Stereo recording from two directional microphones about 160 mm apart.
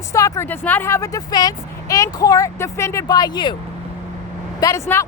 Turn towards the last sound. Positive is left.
turn(degrees=15)  # may be behind; listen again after turning